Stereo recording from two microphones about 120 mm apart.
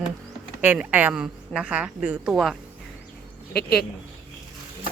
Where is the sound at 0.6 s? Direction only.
15° right (ahead or behind).